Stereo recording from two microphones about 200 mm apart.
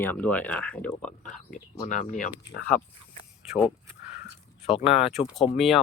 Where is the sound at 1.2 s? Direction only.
40° left (ahead or behind).